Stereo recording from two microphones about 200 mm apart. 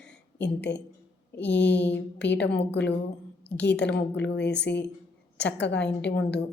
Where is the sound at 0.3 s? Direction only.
60° left (ahead or behind).